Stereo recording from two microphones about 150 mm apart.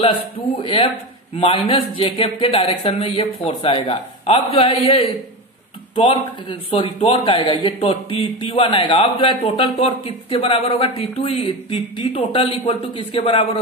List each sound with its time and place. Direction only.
0.0 s speech: 35° left (ahead or behind)
6.7 s speech: 35° left (ahead or behind)